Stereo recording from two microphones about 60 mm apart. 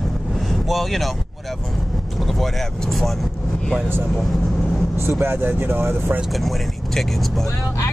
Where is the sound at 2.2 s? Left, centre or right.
Centre.